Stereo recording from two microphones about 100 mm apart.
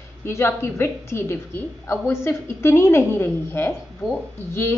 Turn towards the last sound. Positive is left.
turn(degrees=25)  # may be behind; listen again after turning